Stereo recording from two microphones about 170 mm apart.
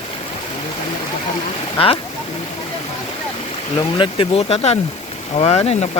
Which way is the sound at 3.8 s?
30° left (ahead or behind).